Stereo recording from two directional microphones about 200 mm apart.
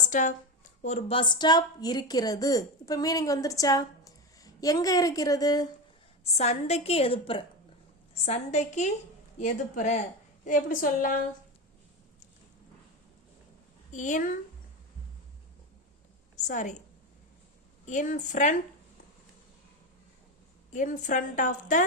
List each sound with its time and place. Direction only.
0.1 s a woman's voice: 40° left (ahead or behind); by 5.6 s 20° left (ahead or behind)
6.3 s a woman's voice: 35° left (ahead or behind)
13.9 s a woman's voice: 40° left (ahead or behind)
16.5 s a woman's voice: 40° left (ahead or behind)
17.8 s a woman's voice: 40° left (ahead or behind)
20.7 s a woman's voice: 40° left (ahead or behind)